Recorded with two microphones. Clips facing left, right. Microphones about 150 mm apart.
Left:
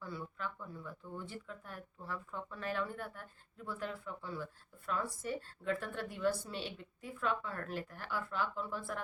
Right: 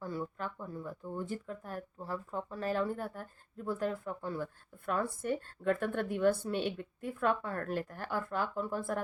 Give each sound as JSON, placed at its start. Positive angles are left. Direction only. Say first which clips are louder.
{"t": 0.0, "sound": "speech", "louder": "right 5 dB", "side_deg": -45}